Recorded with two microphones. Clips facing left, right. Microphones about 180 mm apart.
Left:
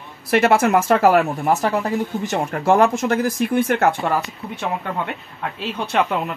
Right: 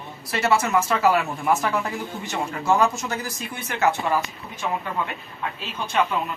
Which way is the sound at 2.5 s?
55° left (ahead or behind).